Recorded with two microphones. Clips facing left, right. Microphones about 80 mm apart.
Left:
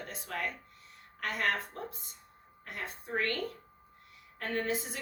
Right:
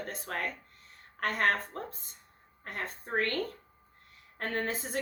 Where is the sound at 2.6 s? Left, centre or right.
Right.